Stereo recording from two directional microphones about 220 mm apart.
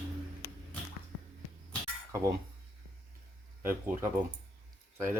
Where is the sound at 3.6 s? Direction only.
10° right (ahead or behind).